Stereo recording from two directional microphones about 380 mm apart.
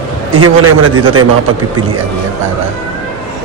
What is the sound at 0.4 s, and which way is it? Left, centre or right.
Speech, right.